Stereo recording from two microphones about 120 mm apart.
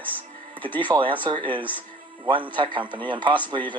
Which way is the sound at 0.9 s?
45° right (ahead or behind).